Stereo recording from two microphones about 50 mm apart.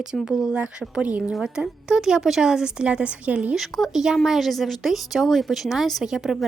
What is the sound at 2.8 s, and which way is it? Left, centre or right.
Speech, right.